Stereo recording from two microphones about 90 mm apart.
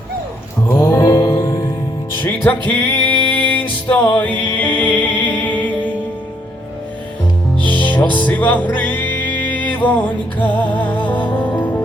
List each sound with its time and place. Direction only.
0.8 s music: 45° left (ahead or behind)
2.2 s music: 20° left (ahead or behind)
7.6 s music: 20° left (ahead or behind)